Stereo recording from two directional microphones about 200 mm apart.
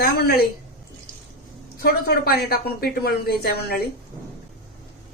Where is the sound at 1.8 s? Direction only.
50° left (ahead or behind).